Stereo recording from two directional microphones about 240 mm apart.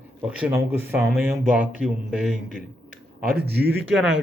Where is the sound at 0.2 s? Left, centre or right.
Centre.